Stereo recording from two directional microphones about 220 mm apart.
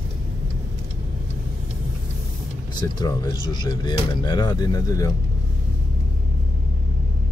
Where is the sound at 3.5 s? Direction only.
20° left (ahead or behind).